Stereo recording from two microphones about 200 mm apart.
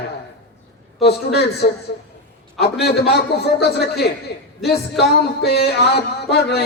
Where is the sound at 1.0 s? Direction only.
55° left (ahead or behind).